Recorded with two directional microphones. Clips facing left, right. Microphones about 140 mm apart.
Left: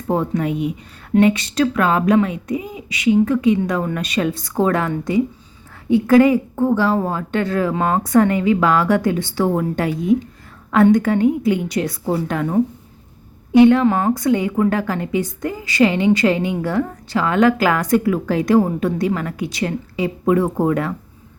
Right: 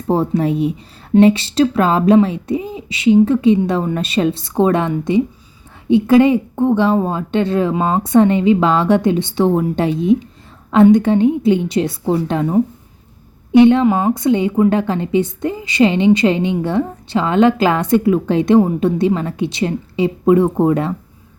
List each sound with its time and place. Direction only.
0.1 s a woman's voice: 30° right (ahead or behind)